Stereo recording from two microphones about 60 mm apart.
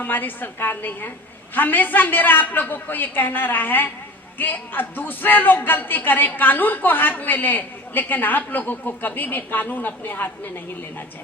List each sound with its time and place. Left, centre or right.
0.0 s a man's voice: left